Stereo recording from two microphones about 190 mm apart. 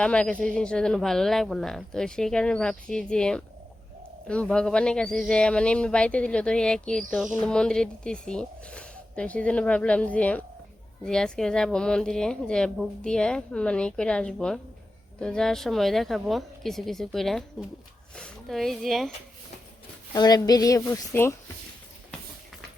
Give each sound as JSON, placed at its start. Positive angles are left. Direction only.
{"t": 0.0, "sound": "speech", "side_deg": 5}
{"t": 20.1, "sound": "a woman's voice", "side_deg": 20}